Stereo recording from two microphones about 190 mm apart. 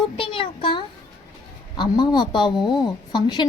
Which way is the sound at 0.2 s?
25° left (ahead or behind).